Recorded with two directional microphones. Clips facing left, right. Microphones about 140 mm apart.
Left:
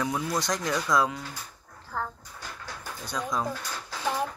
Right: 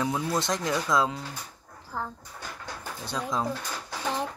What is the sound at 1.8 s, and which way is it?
Bird, 15° right (ahead or behind).